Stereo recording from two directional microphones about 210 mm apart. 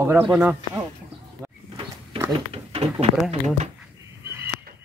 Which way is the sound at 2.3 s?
30° right (ahead or behind).